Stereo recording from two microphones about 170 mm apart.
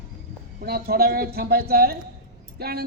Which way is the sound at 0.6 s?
65° right (ahead or behind).